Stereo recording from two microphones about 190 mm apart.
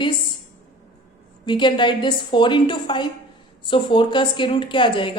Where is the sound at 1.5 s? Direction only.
25° left (ahead or behind).